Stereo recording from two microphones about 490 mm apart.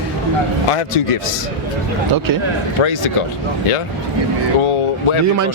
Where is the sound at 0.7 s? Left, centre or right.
Left.